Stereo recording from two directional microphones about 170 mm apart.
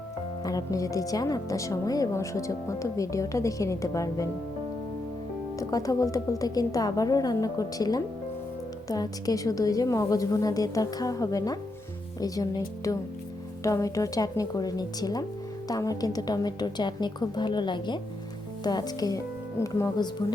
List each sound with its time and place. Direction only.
0.4 s speech: 20° left (ahead or behind)
5.5 s speech: 20° left (ahead or behind)